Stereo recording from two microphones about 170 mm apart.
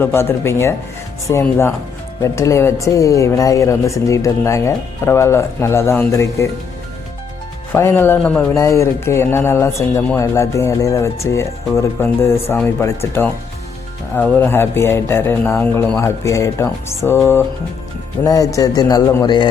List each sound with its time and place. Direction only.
0.0 s speech: 15° left (ahead or behind)
7.7 s speech: 15° left (ahead or behind)
18.3 s a man's voice: 20° left (ahead or behind)